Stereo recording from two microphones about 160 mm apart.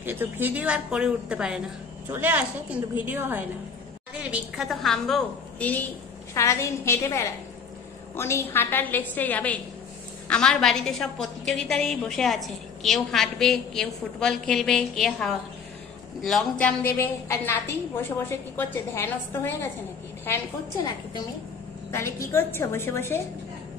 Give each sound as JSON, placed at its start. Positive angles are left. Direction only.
{"t": 0.0, "sound": "a woman's voice", "side_deg": -15}
{"t": 6.3, "sound": "a woman's voice", "side_deg": 20}
{"t": 21.9, "sound": "a woman's voice", "side_deg": 15}